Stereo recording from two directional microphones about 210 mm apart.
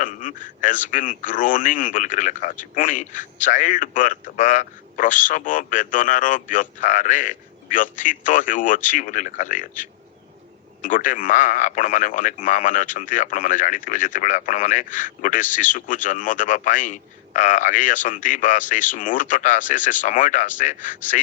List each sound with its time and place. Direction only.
0.0 s a man's voice: 40° left (ahead or behind)